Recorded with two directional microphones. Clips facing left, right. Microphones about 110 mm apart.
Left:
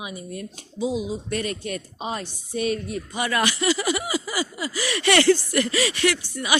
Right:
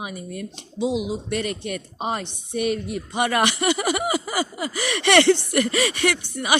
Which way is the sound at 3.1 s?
60° right (ahead or behind).